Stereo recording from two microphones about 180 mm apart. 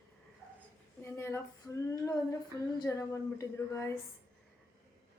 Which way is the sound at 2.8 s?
15° left (ahead or behind).